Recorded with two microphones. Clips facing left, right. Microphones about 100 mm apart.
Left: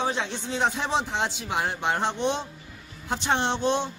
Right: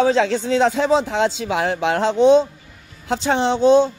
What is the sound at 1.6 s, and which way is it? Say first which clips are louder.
Speech: right 7 dB; 90° right.